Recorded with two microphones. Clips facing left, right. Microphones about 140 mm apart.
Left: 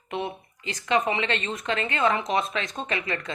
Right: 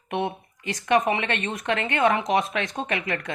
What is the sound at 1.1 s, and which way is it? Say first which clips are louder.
Speech: right 1 dB; 55° right (ahead or behind).